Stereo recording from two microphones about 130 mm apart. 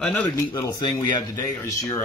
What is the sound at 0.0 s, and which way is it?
Speech, 10° left (ahead or behind).